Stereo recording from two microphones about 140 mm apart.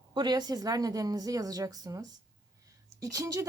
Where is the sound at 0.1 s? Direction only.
30° right (ahead or behind).